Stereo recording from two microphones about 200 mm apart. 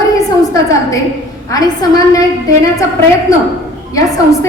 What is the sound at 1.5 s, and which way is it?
Speech, 20° left (ahead or behind).